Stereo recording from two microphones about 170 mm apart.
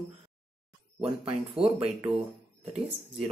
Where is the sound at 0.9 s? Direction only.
35° right (ahead or behind).